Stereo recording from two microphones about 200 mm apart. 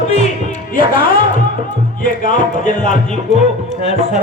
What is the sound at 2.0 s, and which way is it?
Speech, 40° left (ahead or behind).